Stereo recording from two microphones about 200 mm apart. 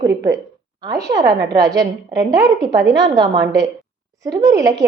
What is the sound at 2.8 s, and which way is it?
Speech, 60° right (ahead or behind).